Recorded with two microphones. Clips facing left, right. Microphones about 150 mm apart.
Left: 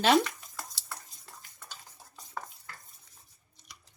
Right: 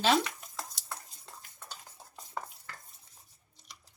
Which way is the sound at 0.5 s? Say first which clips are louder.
Right 1 dB; 20° right (ahead or behind).